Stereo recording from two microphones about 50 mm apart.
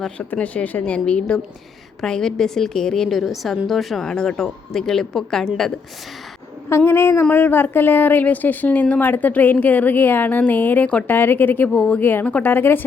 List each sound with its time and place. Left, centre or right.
0.2 s a woman's voice: left
2.0 s speech: centre
3.1 s a woman's voice: centre
4.0 s speech: centre
6.7 s a woman's voice: left
12.4 s a woman's voice: left